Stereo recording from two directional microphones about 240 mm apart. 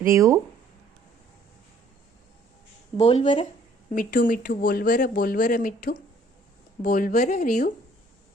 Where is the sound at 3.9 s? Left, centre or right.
Left.